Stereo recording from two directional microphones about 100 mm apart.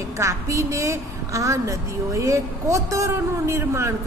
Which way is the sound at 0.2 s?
30° right (ahead or behind).